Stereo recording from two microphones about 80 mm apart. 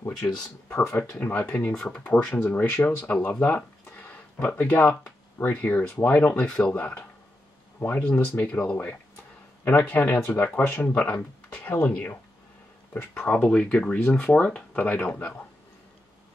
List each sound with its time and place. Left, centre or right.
0.7 s speech: left
13.2 s speech: centre